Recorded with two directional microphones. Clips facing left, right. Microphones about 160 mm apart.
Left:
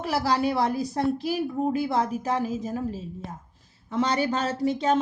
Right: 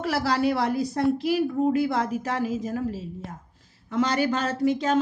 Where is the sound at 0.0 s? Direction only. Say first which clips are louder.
Right 1 dB; 15° left (ahead or behind).